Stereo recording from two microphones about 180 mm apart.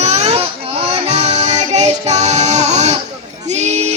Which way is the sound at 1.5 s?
40° right (ahead or behind).